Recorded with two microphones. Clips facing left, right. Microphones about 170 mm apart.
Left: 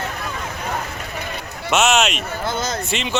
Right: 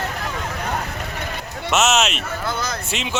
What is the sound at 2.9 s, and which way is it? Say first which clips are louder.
Speech: left 2 dB; 5° right (ahead or behind).